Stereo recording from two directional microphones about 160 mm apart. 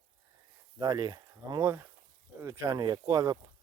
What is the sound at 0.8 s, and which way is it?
Speech, 25° right (ahead or behind).